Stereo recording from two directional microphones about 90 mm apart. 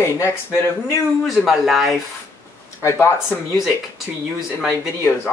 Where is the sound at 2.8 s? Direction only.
30° left (ahead or behind).